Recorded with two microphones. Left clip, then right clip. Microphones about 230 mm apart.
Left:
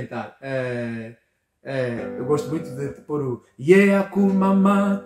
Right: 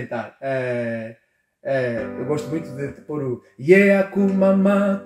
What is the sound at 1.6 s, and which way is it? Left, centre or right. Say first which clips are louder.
Music: right 4 dB; centre.